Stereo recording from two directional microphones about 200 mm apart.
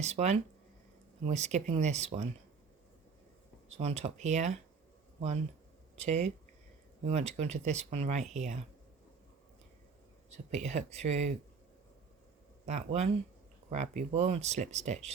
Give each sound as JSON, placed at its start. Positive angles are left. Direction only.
{"t": 0.0, "sound": "speech", "side_deg": -35}
{"t": 3.7, "sound": "speech", "side_deg": -35}
{"t": 6.0, "sound": "speech", "side_deg": -35}
{"t": 10.2, "sound": "speech", "side_deg": -35}
{"t": 12.6, "sound": "speech", "side_deg": -35}